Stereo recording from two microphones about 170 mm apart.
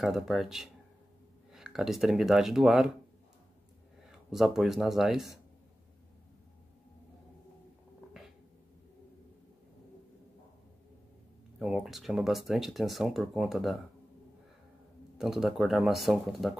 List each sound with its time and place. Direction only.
0.0 s speech: centre (ahead or behind)
4.1 s speech: centre (ahead or behind)
11.6 s speech: centre (ahead or behind)
15.1 s speech: centre (ahead or behind)